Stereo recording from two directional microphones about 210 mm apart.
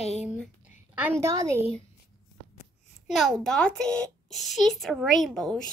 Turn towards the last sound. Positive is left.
turn(degrees=0)  # may be behind; listen again after turning